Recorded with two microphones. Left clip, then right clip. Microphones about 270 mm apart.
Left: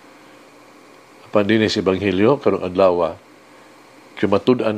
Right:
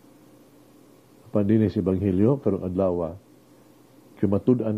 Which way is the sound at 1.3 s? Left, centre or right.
Centre.